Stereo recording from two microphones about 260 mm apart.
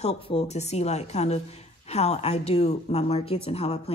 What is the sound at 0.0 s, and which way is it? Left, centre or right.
Speech, left.